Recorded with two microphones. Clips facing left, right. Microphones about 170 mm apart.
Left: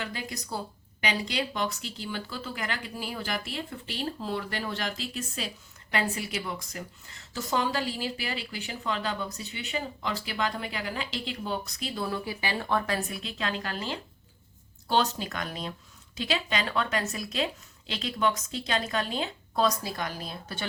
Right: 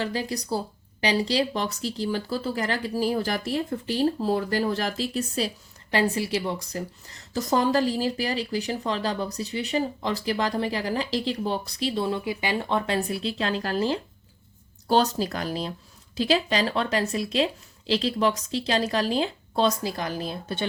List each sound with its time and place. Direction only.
0.0 s a woman's voice: 35° right (ahead or behind)